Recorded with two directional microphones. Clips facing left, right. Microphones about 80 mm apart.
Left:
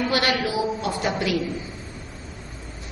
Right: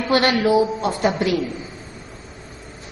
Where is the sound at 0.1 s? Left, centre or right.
Right.